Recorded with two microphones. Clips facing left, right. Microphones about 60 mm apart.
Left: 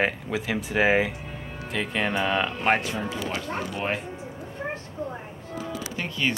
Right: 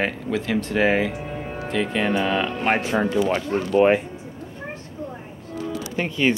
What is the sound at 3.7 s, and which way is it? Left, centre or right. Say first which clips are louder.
Speech: right 18 dB; right.